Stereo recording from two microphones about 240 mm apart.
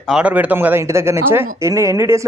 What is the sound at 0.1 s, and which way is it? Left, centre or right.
Speech, centre.